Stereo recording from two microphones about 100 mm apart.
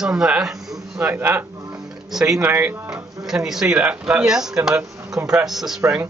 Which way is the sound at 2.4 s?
20° right (ahead or behind).